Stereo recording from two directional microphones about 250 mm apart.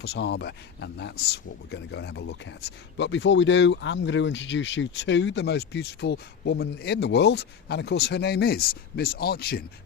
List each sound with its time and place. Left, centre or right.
0.0 s speech: left